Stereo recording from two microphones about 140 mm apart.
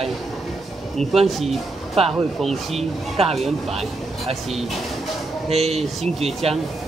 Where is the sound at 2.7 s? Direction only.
45° right (ahead or behind).